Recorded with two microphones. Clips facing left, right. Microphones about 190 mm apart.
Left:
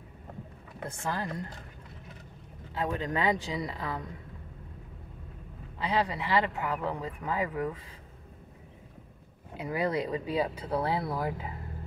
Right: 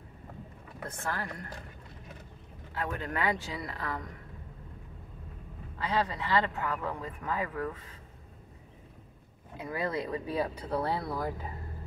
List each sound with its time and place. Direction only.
0.8 s speech: 20° left (ahead or behind)
2.7 s speech: 20° left (ahead or behind)
5.8 s speech: 15° left (ahead or behind)
9.6 s speech: 15° left (ahead or behind)